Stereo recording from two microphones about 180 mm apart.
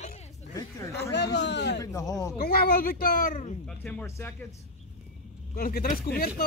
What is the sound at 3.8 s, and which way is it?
Speech, 10° left (ahead or behind).